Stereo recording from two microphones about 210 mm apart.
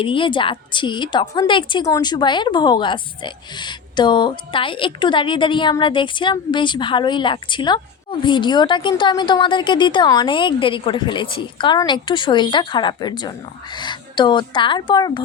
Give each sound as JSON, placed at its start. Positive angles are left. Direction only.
{"t": 0.0, "sound": "a woman's voice", "side_deg": 25}